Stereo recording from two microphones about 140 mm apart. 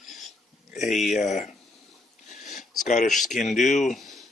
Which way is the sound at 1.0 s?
60° left (ahead or behind).